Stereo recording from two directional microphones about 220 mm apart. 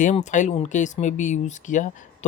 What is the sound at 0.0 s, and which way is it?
Speech, 35° left (ahead or behind).